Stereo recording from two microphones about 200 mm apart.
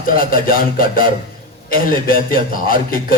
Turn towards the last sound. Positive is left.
turn(degrees=45)  # may be behind; listen again after turning